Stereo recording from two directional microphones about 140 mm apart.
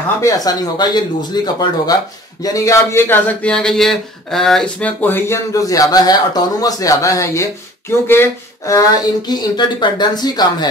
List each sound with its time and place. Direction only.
0.2 s speech: 25° left (ahead or behind)